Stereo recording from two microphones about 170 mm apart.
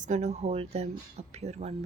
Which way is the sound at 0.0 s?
45° right (ahead or behind).